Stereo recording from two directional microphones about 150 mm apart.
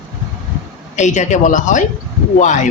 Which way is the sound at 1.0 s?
55° left (ahead or behind).